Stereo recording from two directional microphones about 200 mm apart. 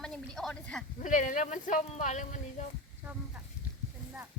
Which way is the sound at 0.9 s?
40° left (ahead or behind).